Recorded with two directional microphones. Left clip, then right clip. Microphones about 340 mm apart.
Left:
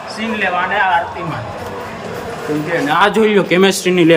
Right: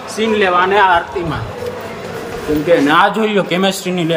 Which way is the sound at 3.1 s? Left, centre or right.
Centre.